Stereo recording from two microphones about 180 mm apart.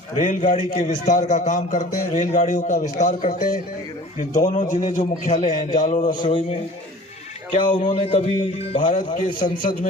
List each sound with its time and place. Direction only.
0.2 s a man's voice: 45° left (ahead or behind)
7.9 s a man's voice: 35° left (ahead or behind)